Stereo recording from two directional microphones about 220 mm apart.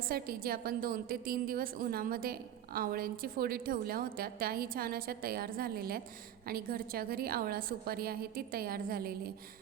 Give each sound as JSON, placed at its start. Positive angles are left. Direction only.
{"t": 0.1, "sound": "a woman's voice", "side_deg": -45}